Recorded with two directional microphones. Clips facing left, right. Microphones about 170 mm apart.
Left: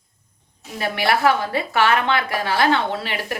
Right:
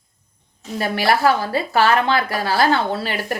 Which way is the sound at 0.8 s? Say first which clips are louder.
Right 2 dB; 40° right (ahead or behind).